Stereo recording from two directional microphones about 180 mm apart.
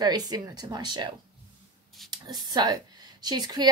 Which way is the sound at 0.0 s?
20° right (ahead or behind).